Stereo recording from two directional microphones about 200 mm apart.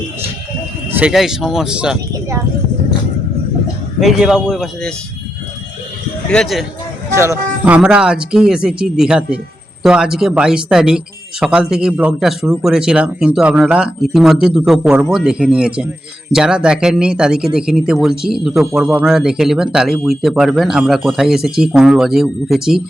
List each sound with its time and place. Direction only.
0.9 s speech: 5° right (ahead or behind)
4.0 s speech: centre (ahead or behind)
6.2 s speech: 5° left (ahead or behind)
7.2 s speech: 10° right (ahead or behind)